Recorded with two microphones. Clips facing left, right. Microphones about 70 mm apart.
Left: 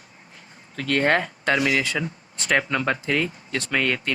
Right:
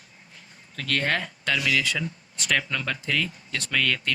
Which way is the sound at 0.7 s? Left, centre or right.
Left.